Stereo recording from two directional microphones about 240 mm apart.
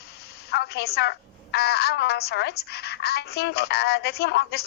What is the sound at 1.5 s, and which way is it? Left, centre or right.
Speech, left.